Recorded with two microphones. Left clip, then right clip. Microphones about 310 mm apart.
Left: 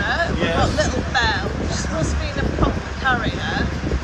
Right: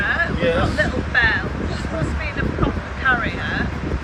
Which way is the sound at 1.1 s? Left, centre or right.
Centre.